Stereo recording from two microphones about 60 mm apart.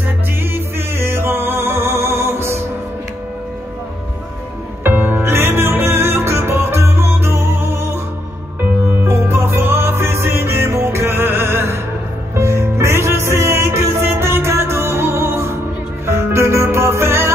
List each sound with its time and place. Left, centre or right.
0.4 s music: right
4.9 s music: right
5.2 s music: right
9.0 s music: right